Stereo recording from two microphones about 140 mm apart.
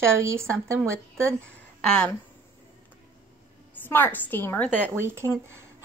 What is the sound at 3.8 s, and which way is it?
A woman's voice, 15° left (ahead or behind).